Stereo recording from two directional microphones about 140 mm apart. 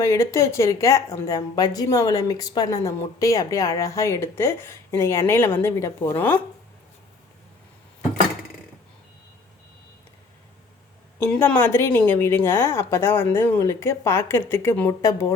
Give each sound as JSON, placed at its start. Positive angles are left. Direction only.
{"t": 0.0, "sound": "speech", "side_deg": 20}
{"t": 11.2, "sound": "a woman's voice", "side_deg": 10}